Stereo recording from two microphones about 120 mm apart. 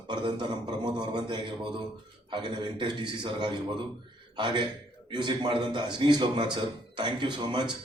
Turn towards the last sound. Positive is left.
turn(degrees=-40)  # may be behind; listen again after turning